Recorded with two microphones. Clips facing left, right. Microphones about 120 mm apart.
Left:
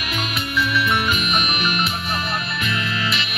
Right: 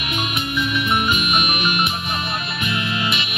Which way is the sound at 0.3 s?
20° right (ahead or behind).